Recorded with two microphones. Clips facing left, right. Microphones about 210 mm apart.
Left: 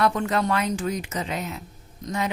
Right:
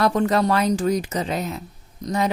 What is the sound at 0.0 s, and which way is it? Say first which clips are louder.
A woman's voice: right 4 dB; 40° right (ahead or behind).